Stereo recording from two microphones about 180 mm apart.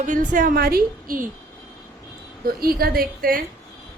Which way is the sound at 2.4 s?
55° right (ahead or behind).